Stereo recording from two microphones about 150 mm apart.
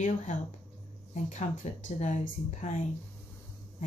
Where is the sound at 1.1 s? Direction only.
50° left (ahead or behind).